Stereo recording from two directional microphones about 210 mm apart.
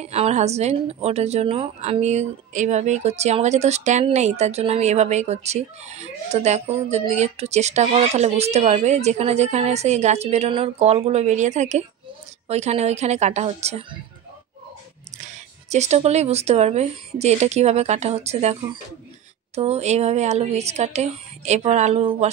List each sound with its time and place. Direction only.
0.0 s speech: 30° right (ahead or behind)
15.3 s speech: 35° right (ahead or behind)